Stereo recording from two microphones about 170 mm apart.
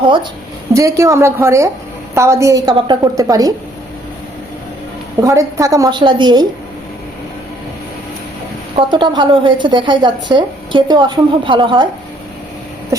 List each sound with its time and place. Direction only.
0.7 s a woman's voice: 20° right (ahead or behind)
5.2 s a woman's voice: 20° right (ahead or behind)
8.7 s a woman's voice: 30° right (ahead or behind)
12.9 s a sound: 20° right (ahead or behind)